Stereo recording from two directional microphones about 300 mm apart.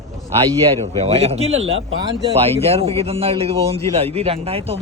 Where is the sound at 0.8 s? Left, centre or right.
Right.